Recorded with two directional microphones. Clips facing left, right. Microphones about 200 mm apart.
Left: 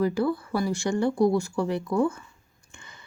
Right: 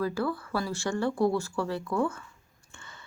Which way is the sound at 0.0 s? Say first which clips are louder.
Left 5 dB; 15° left (ahead or behind).